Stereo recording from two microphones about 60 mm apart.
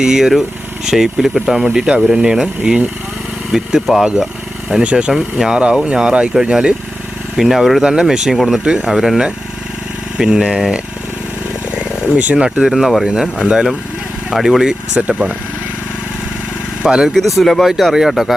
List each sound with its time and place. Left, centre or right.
0.0 s speech: centre
12.1 s speech: right
12.7 s speech: centre
13.4 s speech: centre
16.8 s speech: centre
17.3 s speech: centre